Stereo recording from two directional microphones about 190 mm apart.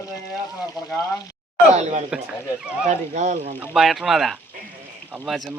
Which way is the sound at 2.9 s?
40° right (ahead or behind).